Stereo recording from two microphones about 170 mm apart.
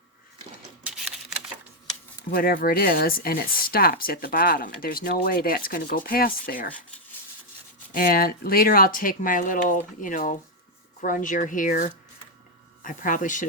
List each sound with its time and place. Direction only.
0.9 s typewriter: 5° right (ahead or behind)
2.3 s speech: 60° left (ahead or behind)
7.9 s speech: 60° left (ahead or behind)